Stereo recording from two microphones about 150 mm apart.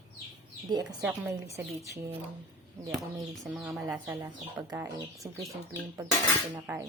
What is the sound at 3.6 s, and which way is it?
Speech, 20° right (ahead or behind).